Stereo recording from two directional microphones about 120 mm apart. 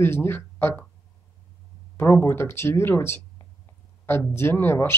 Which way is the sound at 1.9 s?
20° left (ahead or behind).